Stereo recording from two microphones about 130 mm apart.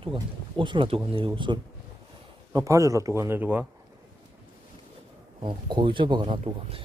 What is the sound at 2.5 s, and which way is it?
A man's voice, 25° right (ahead or behind).